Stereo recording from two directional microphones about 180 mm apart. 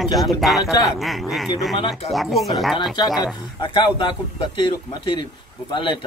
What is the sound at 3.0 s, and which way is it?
Speech, 20° left (ahead or behind).